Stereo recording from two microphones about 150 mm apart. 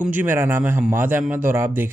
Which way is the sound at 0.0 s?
10° right (ahead or behind).